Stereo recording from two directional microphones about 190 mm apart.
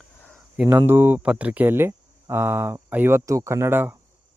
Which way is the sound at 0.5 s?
5° right (ahead or behind).